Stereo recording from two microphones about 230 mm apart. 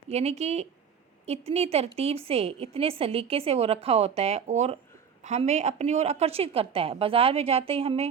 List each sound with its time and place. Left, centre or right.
0.1 s a woman's voice: right